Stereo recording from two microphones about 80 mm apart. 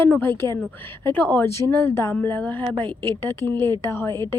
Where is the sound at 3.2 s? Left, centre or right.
Left.